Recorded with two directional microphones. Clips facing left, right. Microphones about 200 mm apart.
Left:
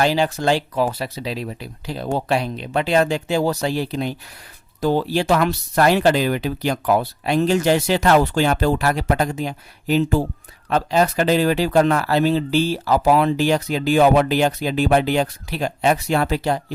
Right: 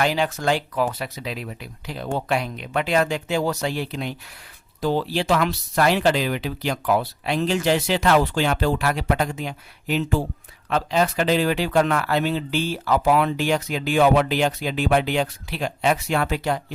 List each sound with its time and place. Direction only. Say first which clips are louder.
0.0 s speech: left 3 dB; 30° left (ahead or behind)